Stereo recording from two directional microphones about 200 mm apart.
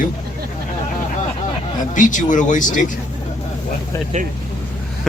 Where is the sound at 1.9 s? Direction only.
40° left (ahead or behind).